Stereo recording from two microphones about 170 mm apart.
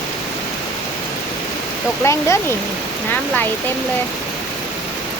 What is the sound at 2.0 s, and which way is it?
Speech, 15° left (ahead or behind).